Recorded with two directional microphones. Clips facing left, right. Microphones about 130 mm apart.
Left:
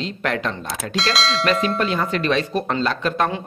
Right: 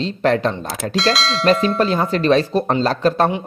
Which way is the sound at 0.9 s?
Centre (ahead or behind).